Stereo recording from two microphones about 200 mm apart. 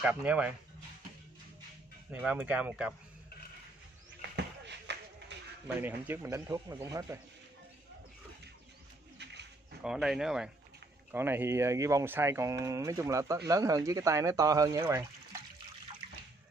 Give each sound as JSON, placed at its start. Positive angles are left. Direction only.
{"t": 0.0, "sound": "speech", "side_deg": -5}
{"t": 2.1, "sound": "speech", "side_deg": -5}
{"t": 4.4, "sound": "a sound", "side_deg": -60}
{"t": 5.8, "sound": "speech", "side_deg": -10}
{"t": 9.2, "sound": "a sound", "side_deg": -60}
{"t": 9.8, "sound": "speech", "side_deg": 0}